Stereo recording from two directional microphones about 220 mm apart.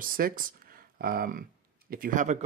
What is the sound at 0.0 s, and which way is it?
Speech, 40° right (ahead or behind).